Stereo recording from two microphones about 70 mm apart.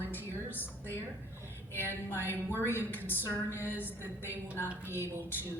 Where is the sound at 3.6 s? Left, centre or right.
Right.